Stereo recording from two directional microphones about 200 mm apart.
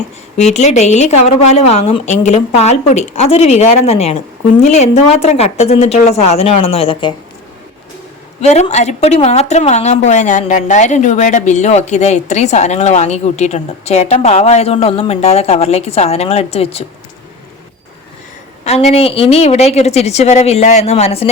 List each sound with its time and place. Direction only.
0.3 s a woman's voice: 35° left (ahead or behind)
8.4 s a woman's voice: 35° left (ahead or behind)
18.6 s a woman's voice: 35° left (ahead or behind)